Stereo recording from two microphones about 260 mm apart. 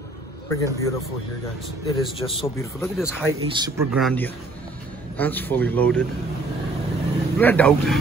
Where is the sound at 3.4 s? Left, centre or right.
Centre.